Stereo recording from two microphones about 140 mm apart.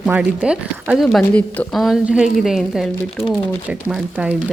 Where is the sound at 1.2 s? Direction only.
10° left (ahead or behind).